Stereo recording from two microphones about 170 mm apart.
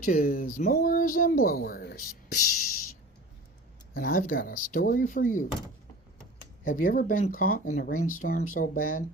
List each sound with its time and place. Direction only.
0.0 s speech: 55° left (ahead or behind)
3.9 s speech: 55° left (ahead or behind)
6.7 s speech: 55° left (ahead or behind)